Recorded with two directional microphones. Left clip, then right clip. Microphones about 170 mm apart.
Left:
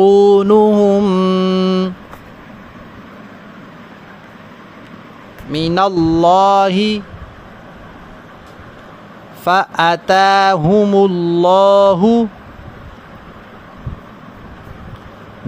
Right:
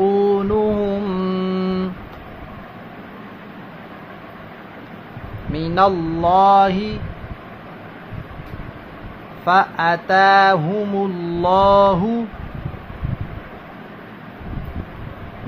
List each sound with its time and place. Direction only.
0.0 s mantra: 65° left (ahead or behind); by 1.9 s 35° left (ahead or behind)
5.5 s speech: 40° left (ahead or behind)
5.9 s mantra: 55° left (ahead or behind)
9.4 s mantra: 60° left (ahead or behind)